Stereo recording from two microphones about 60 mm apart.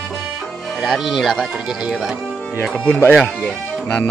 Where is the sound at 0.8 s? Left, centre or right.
Centre.